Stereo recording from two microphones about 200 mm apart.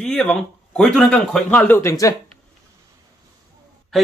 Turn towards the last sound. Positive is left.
turn(degrees=0)  # may be behind; listen again after turning